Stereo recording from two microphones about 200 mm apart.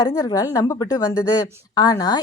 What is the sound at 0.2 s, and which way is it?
A woman's voice, 15° left (ahead or behind).